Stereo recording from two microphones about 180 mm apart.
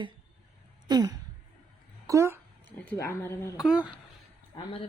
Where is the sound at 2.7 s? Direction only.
10° left (ahead or behind).